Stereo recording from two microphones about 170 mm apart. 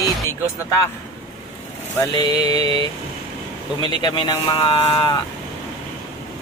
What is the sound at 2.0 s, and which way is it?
Speech, 25° left (ahead or behind).